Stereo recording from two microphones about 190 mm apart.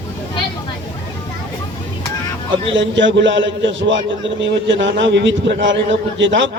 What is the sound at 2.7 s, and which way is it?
A man's voice, 75° right (ahead or behind).